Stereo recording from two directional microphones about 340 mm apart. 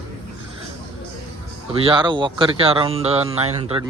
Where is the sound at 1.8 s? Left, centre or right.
Centre.